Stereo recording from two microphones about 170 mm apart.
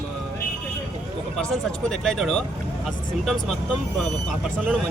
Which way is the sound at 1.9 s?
Centre (ahead or behind).